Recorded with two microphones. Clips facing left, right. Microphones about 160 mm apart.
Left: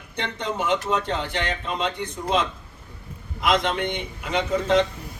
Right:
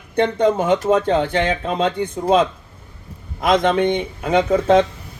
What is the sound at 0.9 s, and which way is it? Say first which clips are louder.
A man's voice: right 9 dB; 50° right (ahead or behind).